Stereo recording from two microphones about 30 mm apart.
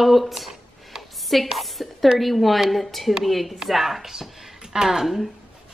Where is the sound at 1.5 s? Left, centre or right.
Centre.